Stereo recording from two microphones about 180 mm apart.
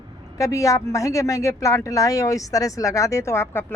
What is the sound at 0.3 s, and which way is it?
Speech, 20° left (ahead or behind).